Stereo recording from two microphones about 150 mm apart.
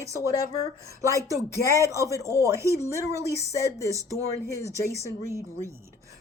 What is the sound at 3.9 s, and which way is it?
Speech, 20° right (ahead or behind).